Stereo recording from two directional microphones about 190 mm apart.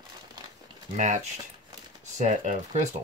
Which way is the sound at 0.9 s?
40° right (ahead or behind).